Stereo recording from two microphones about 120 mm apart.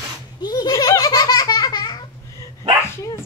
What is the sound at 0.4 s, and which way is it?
Belly laugh, 35° left (ahead or behind).